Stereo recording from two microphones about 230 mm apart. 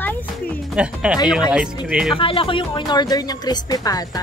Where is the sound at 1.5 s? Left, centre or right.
Centre.